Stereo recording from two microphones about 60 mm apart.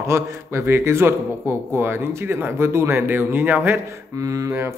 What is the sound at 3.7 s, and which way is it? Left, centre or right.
Speech, right.